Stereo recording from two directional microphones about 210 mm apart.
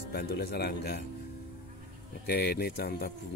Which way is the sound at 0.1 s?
50° left (ahead or behind).